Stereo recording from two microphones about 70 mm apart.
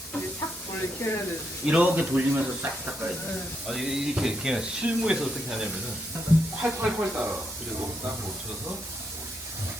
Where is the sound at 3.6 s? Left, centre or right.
Centre.